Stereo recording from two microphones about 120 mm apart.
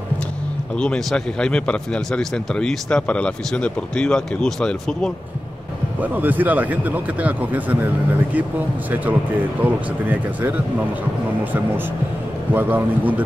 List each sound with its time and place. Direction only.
0.7 s a man's voice: 5° left (ahead or behind)
5.9 s speech: 15° right (ahead or behind)
12.5 s speech: 15° right (ahead or behind)